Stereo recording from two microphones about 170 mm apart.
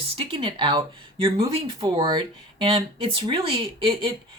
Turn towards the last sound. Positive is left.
turn(degrees=-30)  # may be behind; listen again after turning